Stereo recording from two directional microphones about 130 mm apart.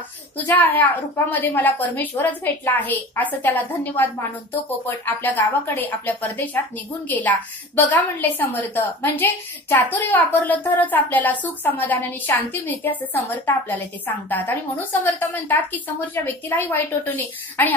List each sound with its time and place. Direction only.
0.4 s a woman's voice: 15° left (ahead or behind)